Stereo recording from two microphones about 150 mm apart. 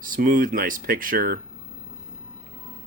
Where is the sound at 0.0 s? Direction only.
65° right (ahead or behind).